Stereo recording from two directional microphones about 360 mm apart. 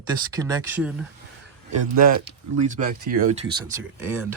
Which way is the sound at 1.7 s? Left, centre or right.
Right.